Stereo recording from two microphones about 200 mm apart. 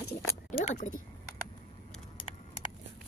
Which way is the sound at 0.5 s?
35° left (ahead or behind).